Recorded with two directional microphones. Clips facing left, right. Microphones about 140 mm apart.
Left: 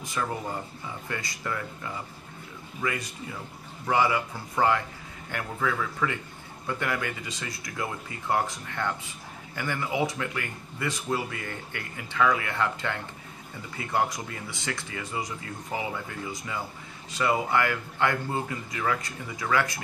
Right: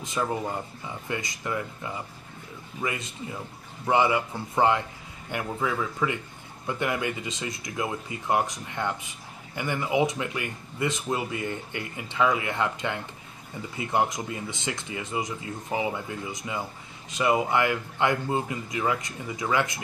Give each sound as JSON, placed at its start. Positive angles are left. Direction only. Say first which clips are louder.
{"t": 0.0, "sound": "speech", "louder": "right 3 dB", "side_deg": -20}